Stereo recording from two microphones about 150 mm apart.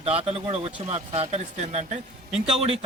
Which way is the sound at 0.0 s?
40° right (ahead or behind).